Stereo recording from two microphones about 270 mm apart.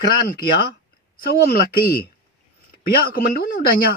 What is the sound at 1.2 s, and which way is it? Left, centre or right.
Speech, left.